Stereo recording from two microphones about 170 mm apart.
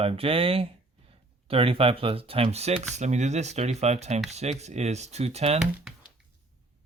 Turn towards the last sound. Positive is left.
turn(degrees=-40)  # may be behind; listen again after turning